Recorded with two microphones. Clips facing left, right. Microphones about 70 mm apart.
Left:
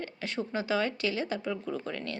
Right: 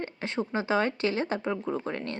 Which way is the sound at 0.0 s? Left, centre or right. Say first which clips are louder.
Right 3 dB; right.